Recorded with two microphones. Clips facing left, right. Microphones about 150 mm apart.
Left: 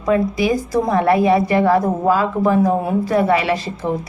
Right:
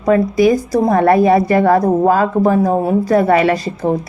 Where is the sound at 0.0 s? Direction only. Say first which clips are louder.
Right 5 dB; 40° right (ahead or behind).